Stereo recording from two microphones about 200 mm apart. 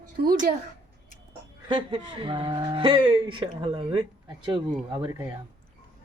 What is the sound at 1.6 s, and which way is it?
Speech, 25° right (ahead or behind).